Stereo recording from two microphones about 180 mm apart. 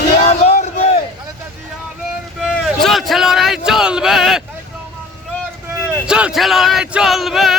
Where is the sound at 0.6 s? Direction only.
35° left (ahead or behind).